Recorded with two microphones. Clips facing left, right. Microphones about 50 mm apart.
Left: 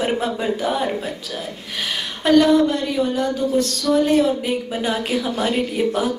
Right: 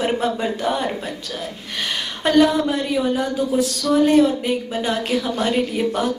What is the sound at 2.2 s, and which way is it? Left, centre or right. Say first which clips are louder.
Speech: left 2 dB; centre.